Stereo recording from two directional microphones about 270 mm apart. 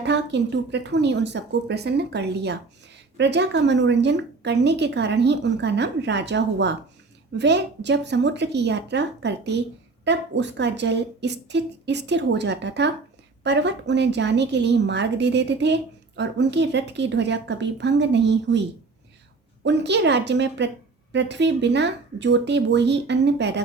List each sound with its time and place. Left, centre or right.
0.0 s a woman's voice: right
19.6 s a woman's voice: right